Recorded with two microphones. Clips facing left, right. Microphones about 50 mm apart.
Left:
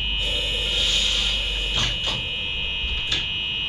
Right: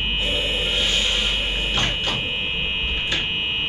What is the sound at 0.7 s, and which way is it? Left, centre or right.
Music, right.